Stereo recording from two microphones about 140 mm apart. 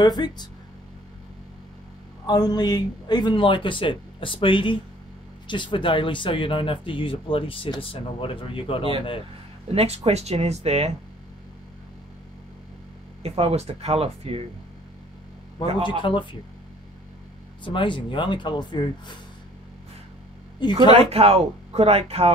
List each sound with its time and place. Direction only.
0.0 s speech: 30° left (ahead or behind)
2.2 s speech: 30° left (ahead or behind)
9.8 s speech: 50° right (ahead or behind)
13.2 s speech: 45° right (ahead or behind)
16.0 s speech: 35° left (ahead or behind)
17.6 s speech: 35° left (ahead or behind)
20.9 s speech: 45° right (ahead or behind)